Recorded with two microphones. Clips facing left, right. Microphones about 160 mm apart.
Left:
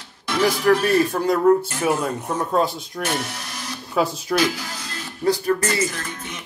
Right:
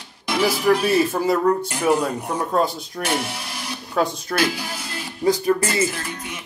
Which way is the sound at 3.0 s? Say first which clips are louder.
Right 1 dB; 10° right (ahead or behind).